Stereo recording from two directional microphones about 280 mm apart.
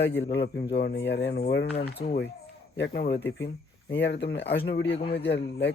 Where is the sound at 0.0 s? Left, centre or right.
Left.